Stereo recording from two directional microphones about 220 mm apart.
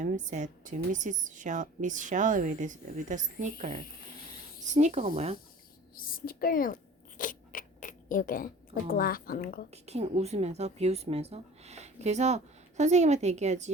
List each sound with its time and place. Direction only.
0.0 s a woman's voice: 35° right (ahead or behind)
5.9 s a woman's voice: 40° left (ahead or behind)
7.2 s a sound: 40° left (ahead or behind)
9.7 s a woman's voice: 30° right (ahead or behind)